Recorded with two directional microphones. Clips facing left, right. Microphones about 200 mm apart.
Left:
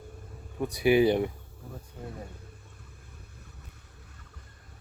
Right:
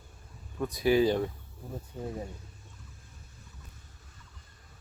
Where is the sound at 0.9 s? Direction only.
15° left (ahead or behind).